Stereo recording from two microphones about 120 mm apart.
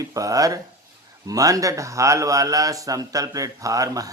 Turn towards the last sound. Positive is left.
turn(degrees=-30)  # may be behind; listen again after turning